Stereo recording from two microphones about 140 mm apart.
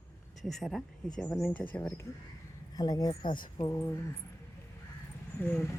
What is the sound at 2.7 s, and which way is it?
Speech, 25° left (ahead or behind).